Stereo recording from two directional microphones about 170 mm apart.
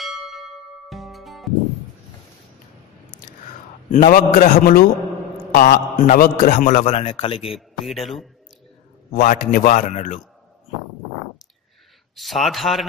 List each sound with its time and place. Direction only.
0.0 s bell: centre (ahead or behind)
3.9 s a man's voice: 55° left (ahead or behind)
6.8 s speech: 35° left (ahead or behind)
7.5 s a man's voice: centre (ahead or behind)
9.1 s a man's voice: 55° left (ahead or behind)
12.2 s a man's voice: centre (ahead or behind)